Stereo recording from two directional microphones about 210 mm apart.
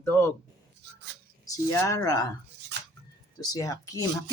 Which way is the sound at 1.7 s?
15° left (ahead or behind).